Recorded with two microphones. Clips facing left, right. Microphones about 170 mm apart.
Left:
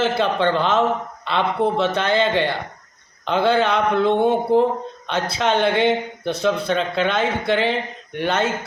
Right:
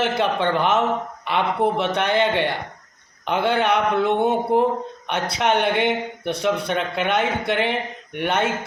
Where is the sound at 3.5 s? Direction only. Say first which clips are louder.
Left 1 dB; 15° right (ahead or behind).